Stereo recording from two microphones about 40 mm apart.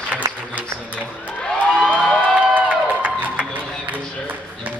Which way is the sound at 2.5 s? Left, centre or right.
Right.